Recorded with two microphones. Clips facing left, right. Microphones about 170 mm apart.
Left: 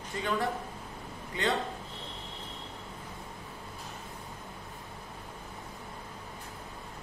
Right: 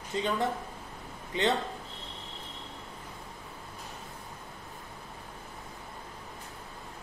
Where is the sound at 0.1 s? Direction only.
20° right (ahead or behind).